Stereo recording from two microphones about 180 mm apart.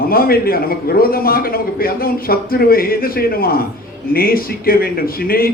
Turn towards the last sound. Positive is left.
turn(degrees=55)  # may be behind; listen again after turning